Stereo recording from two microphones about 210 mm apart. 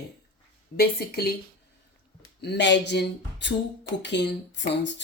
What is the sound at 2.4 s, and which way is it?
Speech, 55° left (ahead or behind).